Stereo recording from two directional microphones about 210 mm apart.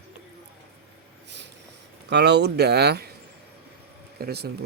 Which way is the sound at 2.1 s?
55° right (ahead or behind).